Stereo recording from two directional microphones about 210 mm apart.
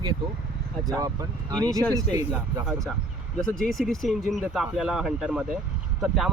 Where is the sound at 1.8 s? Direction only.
10° left (ahead or behind).